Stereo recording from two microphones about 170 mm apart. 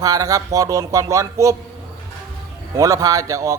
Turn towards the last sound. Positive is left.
turn(degrees=-20)  # may be behind; listen again after turning